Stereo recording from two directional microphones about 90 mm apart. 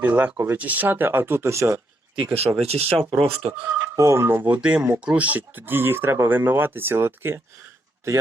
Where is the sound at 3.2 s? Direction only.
90° right.